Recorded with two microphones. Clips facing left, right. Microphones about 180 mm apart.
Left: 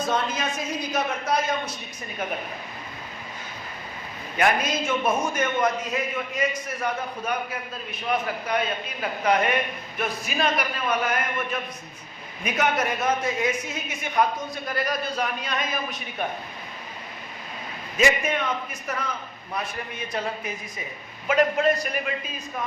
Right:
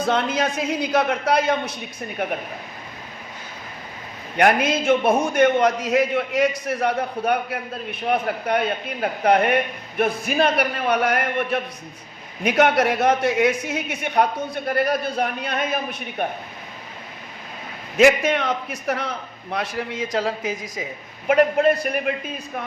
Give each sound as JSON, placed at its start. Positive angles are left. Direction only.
{"t": 0.0, "sound": "a woman's voice", "side_deg": -65}
{"t": 4.4, "sound": "a man's voice", "side_deg": -60}
{"t": 17.9, "sound": "a man's voice", "side_deg": -80}
{"t": 21.2, "sound": "a woman's voice", "side_deg": -55}